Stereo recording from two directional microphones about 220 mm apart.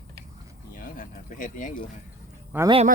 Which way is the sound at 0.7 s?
40° left (ahead or behind).